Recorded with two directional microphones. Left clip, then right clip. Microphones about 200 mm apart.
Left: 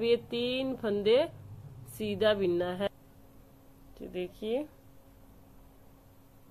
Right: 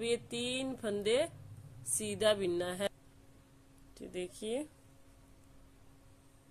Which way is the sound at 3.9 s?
20° right (ahead or behind).